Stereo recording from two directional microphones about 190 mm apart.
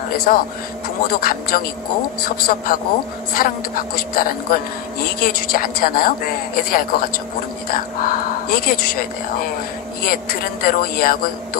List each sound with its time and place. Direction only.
0.3 s a woman's voice: 45° left (ahead or behind)
10.0 s a woman's voice: 50° left (ahead or behind)